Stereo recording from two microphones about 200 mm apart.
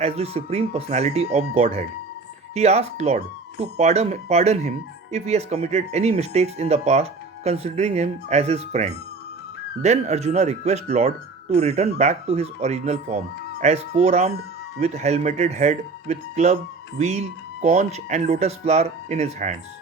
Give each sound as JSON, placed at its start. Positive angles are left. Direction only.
{"t": 0.0, "sound": "speech", "side_deg": -30}